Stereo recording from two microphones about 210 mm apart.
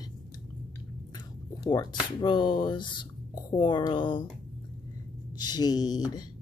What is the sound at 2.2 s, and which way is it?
Speech, 25° left (ahead or behind).